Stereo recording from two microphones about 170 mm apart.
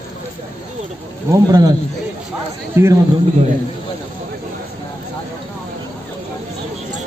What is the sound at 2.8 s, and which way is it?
Speech, 15° right (ahead or behind).